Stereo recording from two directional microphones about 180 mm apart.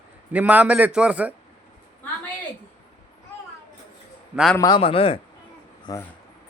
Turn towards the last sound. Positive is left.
turn(degrees=20)  # may be behind; listen again after turning